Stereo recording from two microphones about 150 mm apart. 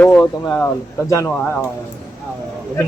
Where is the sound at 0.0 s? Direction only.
10° left (ahead or behind).